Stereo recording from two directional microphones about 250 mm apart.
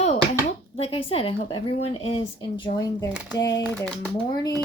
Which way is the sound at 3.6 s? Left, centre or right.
Centre.